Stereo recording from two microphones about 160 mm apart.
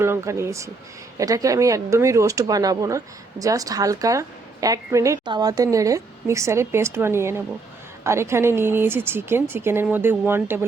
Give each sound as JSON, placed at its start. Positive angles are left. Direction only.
{"t": 0.0, "sound": "speech", "side_deg": -15}